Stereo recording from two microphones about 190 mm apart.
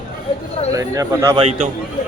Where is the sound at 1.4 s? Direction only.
35° right (ahead or behind).